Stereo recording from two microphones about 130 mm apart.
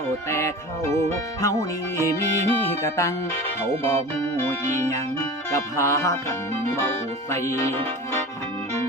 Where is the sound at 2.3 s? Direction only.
20° left (ahead or behind).